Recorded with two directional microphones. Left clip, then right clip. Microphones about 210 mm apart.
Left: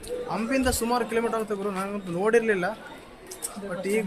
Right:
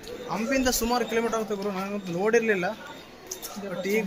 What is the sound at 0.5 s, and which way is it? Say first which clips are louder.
Speech: even; 5° left (ahead or behind).